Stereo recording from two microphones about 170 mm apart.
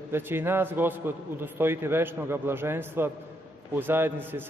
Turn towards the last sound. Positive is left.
turn(degrees=-10)  # may be behind; listen again after turning